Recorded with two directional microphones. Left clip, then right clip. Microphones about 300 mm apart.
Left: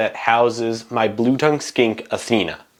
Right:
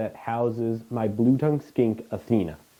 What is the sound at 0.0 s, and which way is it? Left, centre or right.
Speech, centre.